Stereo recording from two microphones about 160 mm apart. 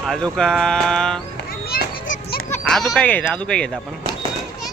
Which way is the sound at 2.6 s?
Centre (ahead or behind).